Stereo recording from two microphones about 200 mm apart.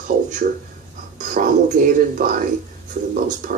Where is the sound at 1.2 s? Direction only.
40° right (ahead or behind).